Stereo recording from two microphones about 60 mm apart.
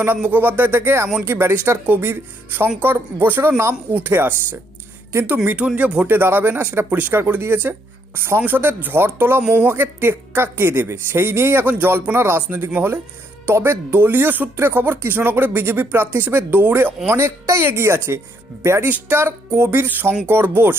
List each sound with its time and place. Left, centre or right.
0.2 s speech: right
5.5 s speech: right
6.1 s speech: right
18.9 s speech: right